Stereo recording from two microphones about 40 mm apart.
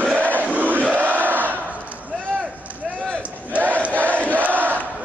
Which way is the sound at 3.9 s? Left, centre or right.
Right.